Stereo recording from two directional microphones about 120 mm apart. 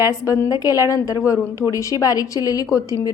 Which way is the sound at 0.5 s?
30° left (ahead or behind).